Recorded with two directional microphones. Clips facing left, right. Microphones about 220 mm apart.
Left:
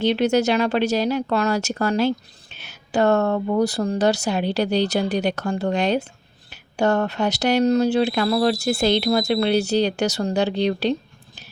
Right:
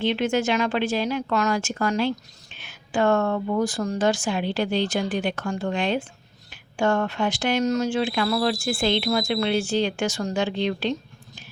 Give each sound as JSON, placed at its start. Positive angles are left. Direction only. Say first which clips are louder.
{"t": 0.0, "sound": "speech", "louder": "left 4 dB", "side_deg": 40}